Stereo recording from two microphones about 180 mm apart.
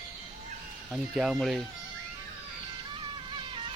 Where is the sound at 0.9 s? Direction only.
Centre (ahead or behind).